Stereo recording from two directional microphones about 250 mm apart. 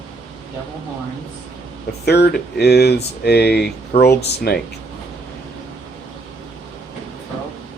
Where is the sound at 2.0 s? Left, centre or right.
Left.